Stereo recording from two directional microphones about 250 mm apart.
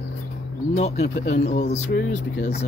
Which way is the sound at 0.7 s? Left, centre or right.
Left.